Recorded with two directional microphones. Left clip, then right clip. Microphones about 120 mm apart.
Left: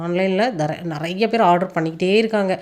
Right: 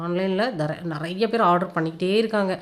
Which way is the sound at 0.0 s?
25° left (ahead or behind).